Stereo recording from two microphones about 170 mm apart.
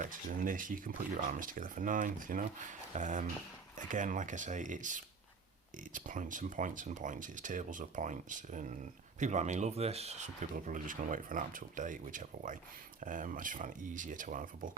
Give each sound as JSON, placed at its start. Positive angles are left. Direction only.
{"t": 0.0, "sound": "speech", "side_deg": -55}